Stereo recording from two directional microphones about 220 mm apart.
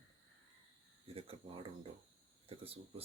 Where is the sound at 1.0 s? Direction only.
25° right (ahead or behind).